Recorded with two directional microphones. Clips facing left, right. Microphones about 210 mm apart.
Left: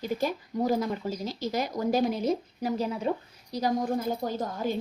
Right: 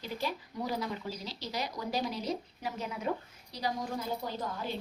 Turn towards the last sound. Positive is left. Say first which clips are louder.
# left 7 dB
turn(degrees=45)  # may be behind; listen again after turning